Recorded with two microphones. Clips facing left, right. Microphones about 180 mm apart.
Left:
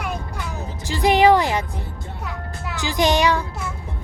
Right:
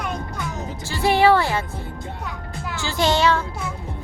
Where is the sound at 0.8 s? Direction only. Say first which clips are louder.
Left 2 dB; 15° left (ahead or behind).